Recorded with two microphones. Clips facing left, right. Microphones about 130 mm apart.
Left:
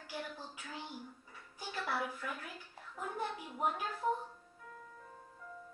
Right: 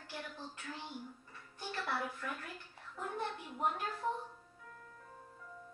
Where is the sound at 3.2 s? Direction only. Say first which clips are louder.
Left 1 dB; 5° left (ahead or behind).